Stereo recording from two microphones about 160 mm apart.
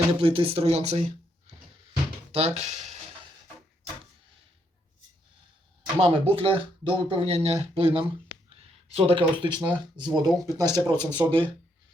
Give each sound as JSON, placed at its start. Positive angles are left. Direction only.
{"t": 0.2, "sound": "speech", "side_deg": -35}
{"t": 2.3, "sound": "speech", "side_deg": -40}
{"t": 6.0, "sound": "speech", "side_deg": -35}